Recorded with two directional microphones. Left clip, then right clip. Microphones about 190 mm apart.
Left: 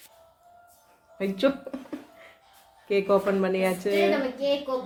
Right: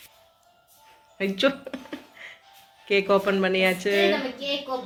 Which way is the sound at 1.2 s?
5° left (ahead or behind).